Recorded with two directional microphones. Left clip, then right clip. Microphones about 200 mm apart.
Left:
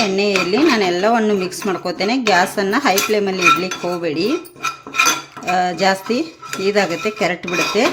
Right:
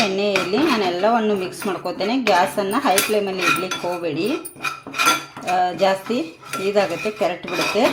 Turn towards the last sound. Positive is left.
turn(degrees=25)  # may be behind; listen again after turning